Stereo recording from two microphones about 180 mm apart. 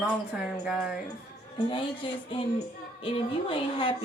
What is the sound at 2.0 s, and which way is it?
A woman's voice, 30° left (ahead or behind).